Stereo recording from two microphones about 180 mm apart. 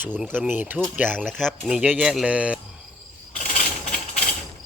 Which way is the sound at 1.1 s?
5° left (ahead or behind).